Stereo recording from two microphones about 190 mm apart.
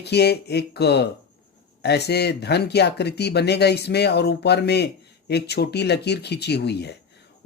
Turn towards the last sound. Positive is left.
turn(degrees=60)  # may be behind; listen again after turning